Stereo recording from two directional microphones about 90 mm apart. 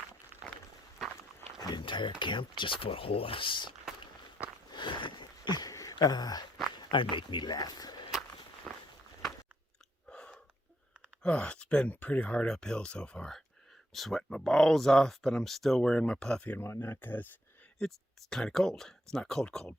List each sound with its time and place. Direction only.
1.5 s a sound: 45° left (ahead or behind)
1.8 s speech: 65° left (ahead or behind)
4.7 s a sound: 60° left (ahead or behind)
6.9 s speech: 65° left (ahead or behind); by 8.0 s 50° left (ahead or behind)
8.7 s walk: centre (ahead or behind)
10.1 s a sound: 10° left (ahead or behind)
11.2 s speech: 10° left (ahead or behind)
16.6 s speech: 25° left (ahead or behind)
17.7 s speech: 5° left (ahead or behind)